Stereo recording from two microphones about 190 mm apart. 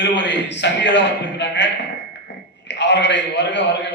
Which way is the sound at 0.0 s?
70° left (ahead or behind).